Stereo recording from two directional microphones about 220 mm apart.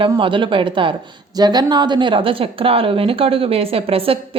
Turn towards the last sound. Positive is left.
turn(degrees=-25)  # may be behind; listen again after turning